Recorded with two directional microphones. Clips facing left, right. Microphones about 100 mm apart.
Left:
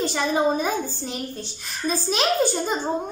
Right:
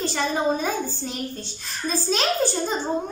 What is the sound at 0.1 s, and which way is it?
Speech, 10° left (ahead or behind).